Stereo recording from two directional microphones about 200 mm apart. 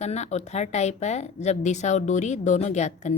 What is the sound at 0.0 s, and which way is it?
A woman's voice, 35° left (ahead or behind).